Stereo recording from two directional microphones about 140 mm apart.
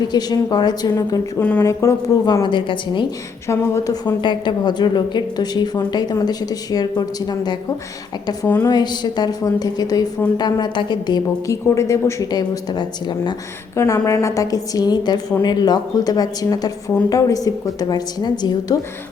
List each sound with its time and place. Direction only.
0.1 s a woman's voice: 30° left (ahead or behind)
1.4 s speech: 10° left (ahead or behind)
1.6 s a woman's voice: 25° left (ahead or behind)
3.4 s a woman's voice: 20° left (ahead or behind)
8.6 s a woman's voice: 30° left (ahead or behind)